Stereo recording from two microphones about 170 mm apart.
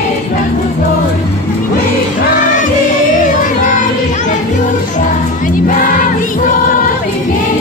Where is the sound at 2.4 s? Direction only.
50° left (ahead or behind).